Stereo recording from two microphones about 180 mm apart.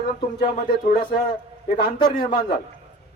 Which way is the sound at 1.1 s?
25° left (ahead or behind).